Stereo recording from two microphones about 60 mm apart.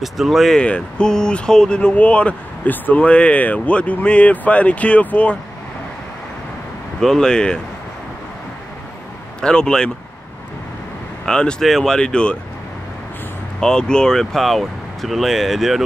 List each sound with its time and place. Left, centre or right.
0.0 s speech: centre
0.6 s speech: centre
7.0 s speech: centre
9.4 s speech: centre
11.2 s speech: centre
11.6 s speech: centre
13.6 s speech: centre